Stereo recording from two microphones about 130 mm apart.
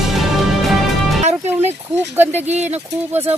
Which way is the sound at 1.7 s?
15° right (ahead or behind).